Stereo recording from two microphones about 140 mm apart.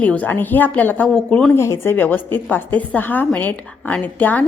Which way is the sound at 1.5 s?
20° left (ahead or behind).